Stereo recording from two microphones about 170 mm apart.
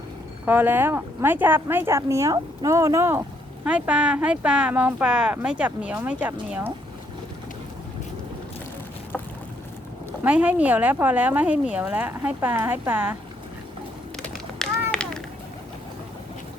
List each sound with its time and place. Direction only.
0.4 s speech: 10° right (ahead or behind)
10.2 s speech: 10° right (ahead or behind)
14.6 s run: 5° left (ahead or behind)